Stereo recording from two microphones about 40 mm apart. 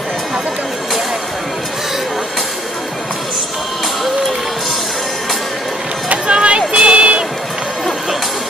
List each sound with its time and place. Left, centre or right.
6.2 s music: right